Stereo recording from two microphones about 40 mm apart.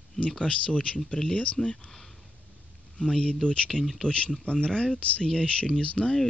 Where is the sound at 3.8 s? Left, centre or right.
Centre.